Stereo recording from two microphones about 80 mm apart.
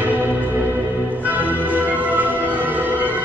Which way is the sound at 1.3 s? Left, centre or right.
Right.